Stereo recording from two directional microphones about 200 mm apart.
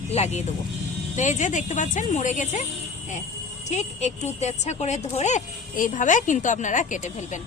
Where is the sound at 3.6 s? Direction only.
35° left (ahead or behind).